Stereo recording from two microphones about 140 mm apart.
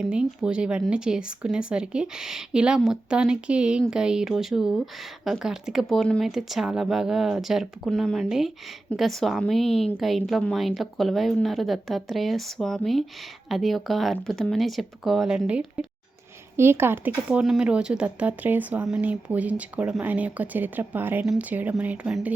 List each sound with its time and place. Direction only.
0.0 s speech: 5° right (ahead or behind)